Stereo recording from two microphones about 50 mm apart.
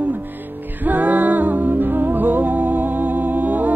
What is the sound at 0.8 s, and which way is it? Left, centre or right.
Music, right.